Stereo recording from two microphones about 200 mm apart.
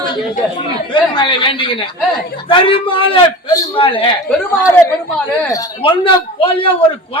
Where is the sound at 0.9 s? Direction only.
25° left (ahead or behind).